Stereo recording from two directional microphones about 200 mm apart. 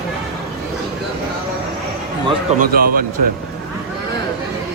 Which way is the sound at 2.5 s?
45° right (ahead or behind).